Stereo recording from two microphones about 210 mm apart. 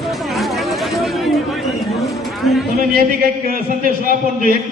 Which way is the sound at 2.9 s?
40° right (ahead or behind).